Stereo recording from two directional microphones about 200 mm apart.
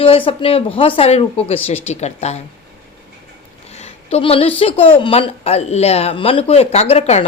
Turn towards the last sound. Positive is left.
turn(degrees=30)  # may be behind; listen again after turning